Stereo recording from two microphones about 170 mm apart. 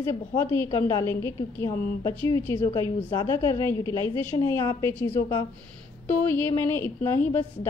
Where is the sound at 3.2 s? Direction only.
20° left (ahead or behind).